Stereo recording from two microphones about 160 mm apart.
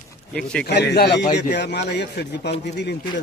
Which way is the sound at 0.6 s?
90° left.